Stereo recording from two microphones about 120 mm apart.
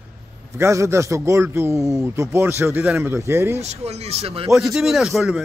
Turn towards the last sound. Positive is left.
turn(degrees=0)  # may be behind; listen again after turning